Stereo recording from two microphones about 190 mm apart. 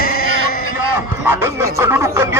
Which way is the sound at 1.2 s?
15° right (ahead or behind).